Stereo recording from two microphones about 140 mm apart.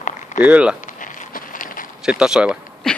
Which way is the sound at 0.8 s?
65° left (ahead or behind).